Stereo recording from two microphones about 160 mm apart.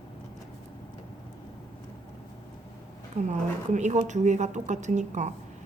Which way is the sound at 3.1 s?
45° right (ahead or behind).